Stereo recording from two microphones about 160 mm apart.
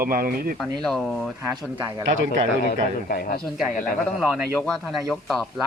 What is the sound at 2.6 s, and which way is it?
Speech, 60° left (ahead or behind).